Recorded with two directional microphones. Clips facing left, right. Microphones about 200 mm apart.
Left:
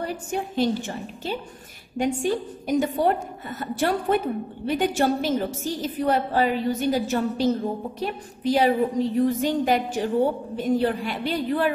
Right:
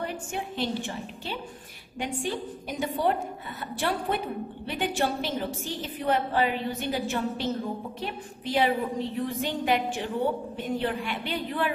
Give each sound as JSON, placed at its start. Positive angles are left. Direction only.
{"t": 0.0, "sound": "a woman's voice", "side_deg": 40}